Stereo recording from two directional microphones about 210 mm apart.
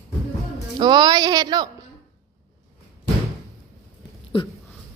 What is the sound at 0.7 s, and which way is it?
Speech, 20° right (ahead or behind).